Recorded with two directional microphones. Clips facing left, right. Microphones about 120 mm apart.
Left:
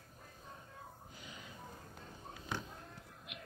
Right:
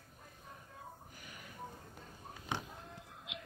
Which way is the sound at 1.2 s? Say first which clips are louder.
Left 3 dB; 20° left (ahead or behind).